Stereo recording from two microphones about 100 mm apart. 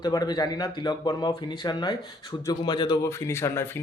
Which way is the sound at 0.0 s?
40° left (ahead or behind).